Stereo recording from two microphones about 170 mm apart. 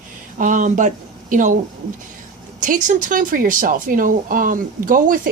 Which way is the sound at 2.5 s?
50° right (ahead or behind).